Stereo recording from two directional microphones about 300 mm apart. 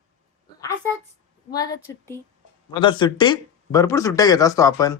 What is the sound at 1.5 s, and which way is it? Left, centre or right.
A man's voice, centre.